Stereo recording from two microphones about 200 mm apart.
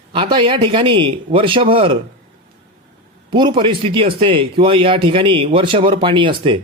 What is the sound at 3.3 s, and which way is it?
Speech, 25° right (ahead or behind).